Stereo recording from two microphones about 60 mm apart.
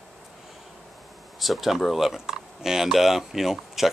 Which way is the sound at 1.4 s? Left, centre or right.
Centre.